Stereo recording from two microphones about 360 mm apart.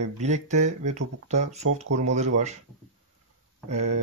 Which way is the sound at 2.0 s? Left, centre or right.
Centre.